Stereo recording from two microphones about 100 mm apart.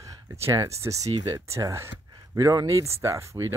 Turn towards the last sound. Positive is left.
turn(degrees=-30)  # may be behind; listen again after turning